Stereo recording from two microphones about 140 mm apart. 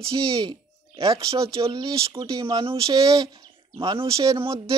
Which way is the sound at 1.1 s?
20° right (ahead or behind).